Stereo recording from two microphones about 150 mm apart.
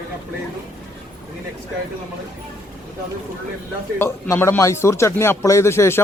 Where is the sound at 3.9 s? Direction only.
15° left (ahead or behind).